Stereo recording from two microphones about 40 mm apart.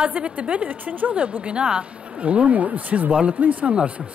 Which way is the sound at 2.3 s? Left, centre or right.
Right.